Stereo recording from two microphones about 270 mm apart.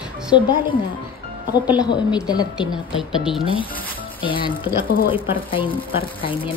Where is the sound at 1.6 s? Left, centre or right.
Centre.